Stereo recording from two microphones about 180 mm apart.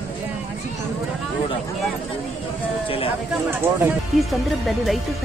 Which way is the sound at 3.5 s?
10° right (ahead or behind).